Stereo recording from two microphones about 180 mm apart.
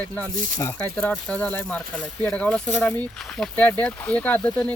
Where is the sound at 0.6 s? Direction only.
15° left (ahead or behind).